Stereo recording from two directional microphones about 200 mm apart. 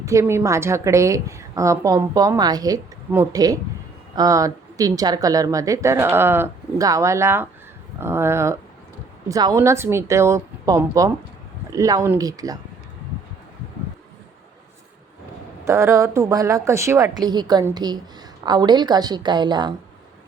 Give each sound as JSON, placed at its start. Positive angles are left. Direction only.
{"t": 0.0, "sound": "a woman's voice", "side_deg": -15}
{"t": 15.6, "sound": "a woman's voice", "side_deg": -15}